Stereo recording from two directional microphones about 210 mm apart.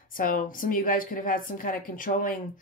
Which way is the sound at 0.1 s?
40° left (ahead or behind).